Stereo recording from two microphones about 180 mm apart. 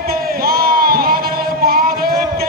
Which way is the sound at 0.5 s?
55° right (ahead or behind).